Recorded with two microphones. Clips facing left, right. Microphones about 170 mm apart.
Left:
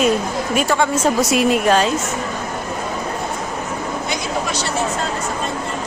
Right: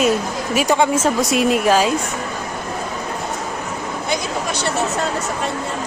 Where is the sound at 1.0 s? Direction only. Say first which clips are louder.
Left 1 dB; centre (ahead or behind).